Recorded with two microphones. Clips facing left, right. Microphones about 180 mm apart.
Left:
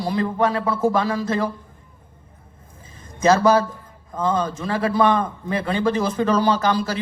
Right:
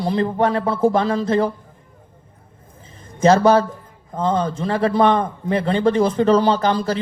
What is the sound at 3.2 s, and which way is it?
A man's voice, 30° right (ahead or behind).